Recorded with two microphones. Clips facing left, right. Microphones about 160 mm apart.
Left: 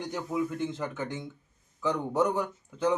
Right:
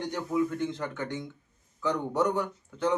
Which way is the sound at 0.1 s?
20° left (ahead or behind).